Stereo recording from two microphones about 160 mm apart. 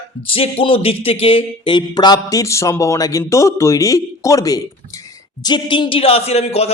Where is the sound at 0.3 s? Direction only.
35° left (ahead or behind).